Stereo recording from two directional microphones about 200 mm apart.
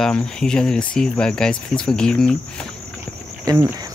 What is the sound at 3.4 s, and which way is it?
Speech, 15° right (ahead or behind).